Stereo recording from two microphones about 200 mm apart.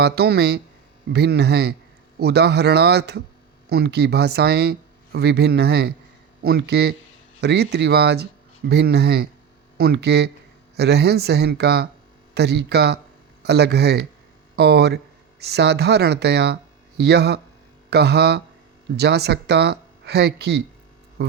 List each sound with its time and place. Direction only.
0.0 s speech: 55° right (ahead or behind)